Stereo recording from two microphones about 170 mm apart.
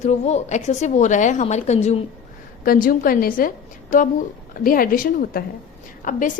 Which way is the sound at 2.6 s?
55° left (ahead or behind).